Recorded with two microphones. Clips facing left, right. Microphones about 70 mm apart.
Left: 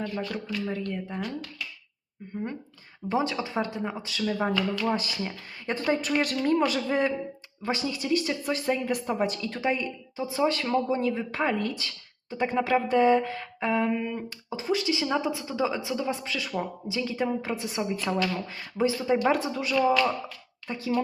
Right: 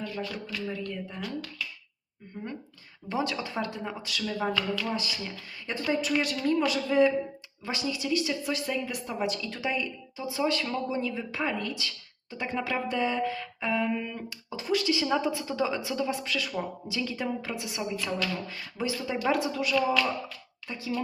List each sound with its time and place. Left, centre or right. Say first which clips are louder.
0.2 s speech: left 3 dB; left
2.3 s speech: left 4 dB; left
13.9 s speech: left 3 dB; centre
20.7 s speech: left 5 dB; left